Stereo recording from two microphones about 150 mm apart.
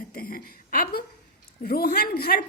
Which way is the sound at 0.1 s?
80° left.